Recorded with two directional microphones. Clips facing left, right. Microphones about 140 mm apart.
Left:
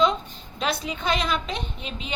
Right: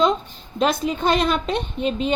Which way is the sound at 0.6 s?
45° right (ahead or behind).